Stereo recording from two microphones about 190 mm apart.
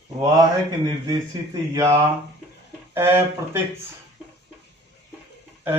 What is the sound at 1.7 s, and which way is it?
Speech, 15° right (ahead or behind).